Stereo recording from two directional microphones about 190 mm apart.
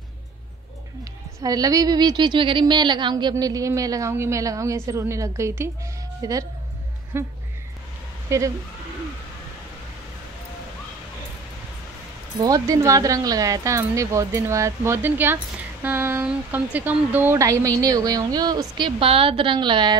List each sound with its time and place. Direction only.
1.4 s a woman's voice: 20° right (ahead or behind)
8.3 s speech: 15° right (ahead or behind)
12.4 s a woman's voice: 20° right (ahead or behind)